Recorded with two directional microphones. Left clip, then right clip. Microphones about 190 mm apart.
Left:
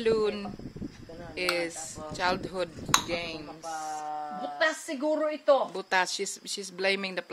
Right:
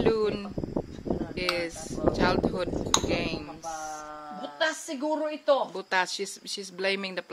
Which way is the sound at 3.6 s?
40° left (ahead or behind).